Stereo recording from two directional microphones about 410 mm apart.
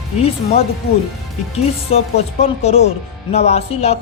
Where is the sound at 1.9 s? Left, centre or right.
Centre.